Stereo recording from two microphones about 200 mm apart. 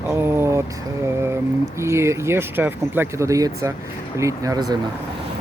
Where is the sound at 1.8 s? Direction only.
15° right (ahead or behind).